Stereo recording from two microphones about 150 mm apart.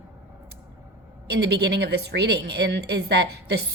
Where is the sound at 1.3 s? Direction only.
90° right.